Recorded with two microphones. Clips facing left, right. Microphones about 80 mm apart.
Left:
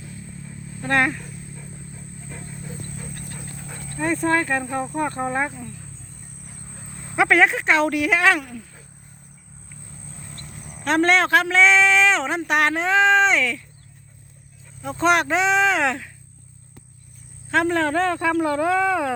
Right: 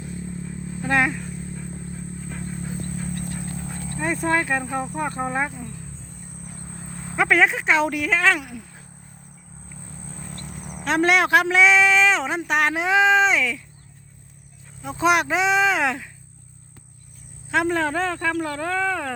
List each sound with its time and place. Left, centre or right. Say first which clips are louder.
0.0 s vehicle: right 6 dB; right
0.8 s speech: left 1 dB; centre
3.9 s a man's voice: left 2 dB; centre
7.2 s speech: left 2 dB; centre
8.4 s a man's voice: left 2 dB; centre
10.3 s a sound: right 4 dB; right
10.8 s a man's voice: left 1 dB; centre
11.6 s speech: even; centre
12.7 s speech: right 1 dB; centre
14.8 s speech: left 1 dB; centre
17.5 s speech: left 2 dB; centre